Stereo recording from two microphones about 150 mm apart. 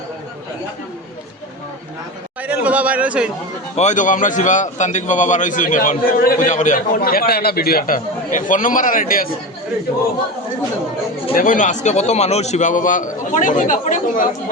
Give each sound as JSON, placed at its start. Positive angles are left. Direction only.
{"t": 2.4, "sound": "a sound", "side_deg": -10}
{"t": 3.8, "sound": "a man's voice", "side_deg": 55}
{"t": 11.3, "sound": "a man's voice", "side_deg": 60}